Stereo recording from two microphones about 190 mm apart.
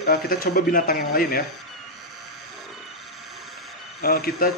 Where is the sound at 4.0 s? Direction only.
50° left (ahead or behind).